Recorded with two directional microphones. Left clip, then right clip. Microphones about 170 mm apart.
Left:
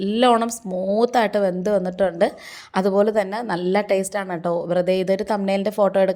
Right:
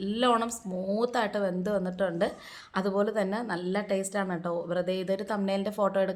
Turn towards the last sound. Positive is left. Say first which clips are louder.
# left 9 dB
turn(degrees=35)  # may be behind; listen again after turning